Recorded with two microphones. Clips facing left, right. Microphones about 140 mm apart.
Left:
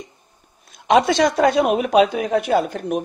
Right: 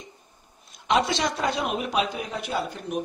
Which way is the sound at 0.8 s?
60° left (ahead or behind).